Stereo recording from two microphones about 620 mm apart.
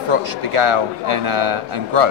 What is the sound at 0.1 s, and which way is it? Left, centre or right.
A man's voice, right.